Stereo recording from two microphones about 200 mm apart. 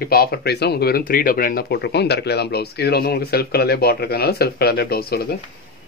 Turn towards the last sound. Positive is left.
turn(degrees=50)  # may be behind; listen again after turning